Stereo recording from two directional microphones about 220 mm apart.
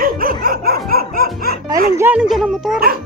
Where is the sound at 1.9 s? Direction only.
10° right (ahead or behind).